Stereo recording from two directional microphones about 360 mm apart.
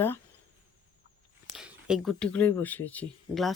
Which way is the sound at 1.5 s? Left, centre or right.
Centre.